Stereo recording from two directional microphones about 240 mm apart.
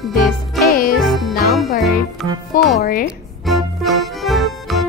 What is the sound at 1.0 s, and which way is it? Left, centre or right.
Music, centre.